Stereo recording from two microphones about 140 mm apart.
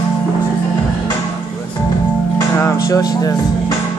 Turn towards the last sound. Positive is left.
turn(degrees=25)  # may be behind; listen again after turning